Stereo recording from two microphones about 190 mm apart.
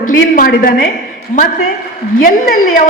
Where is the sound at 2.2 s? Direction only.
45° left (ahead or behind).